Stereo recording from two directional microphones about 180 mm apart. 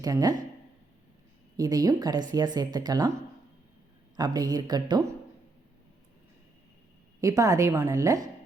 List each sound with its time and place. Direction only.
0.0 s speech: 20° right (ahead or behind)
1.5 s speech: 20° right (ahead or behind)
4.2 s speech: 20° right (ahead or behind)
7.2 s a woman's voice: 20° right (ahead or behind)